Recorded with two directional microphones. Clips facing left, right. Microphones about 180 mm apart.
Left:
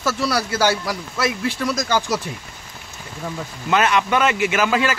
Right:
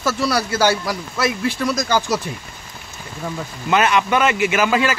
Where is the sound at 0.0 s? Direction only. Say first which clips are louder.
Right 2 dB; 45° right (ahead or behind).